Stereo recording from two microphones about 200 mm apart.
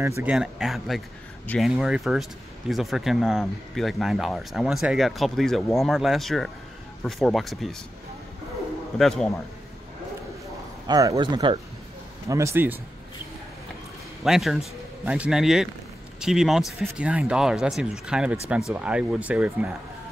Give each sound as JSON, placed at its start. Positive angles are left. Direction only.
{"t": 0.0, "sound": "speech", "side_deg": -10}
{"t": 8.9, "sound": "speech", "side_deg": 0}
{"t": 10.9, "sound": "speech", "side_deg": -20}
{"t": 12.3, "sound": "speech", "side_deg": -15}
{"t": 14.2, "sound": "speech", "side_deg": 0}